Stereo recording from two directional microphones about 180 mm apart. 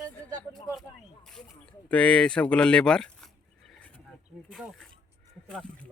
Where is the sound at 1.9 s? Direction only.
5° left (ahead or behind).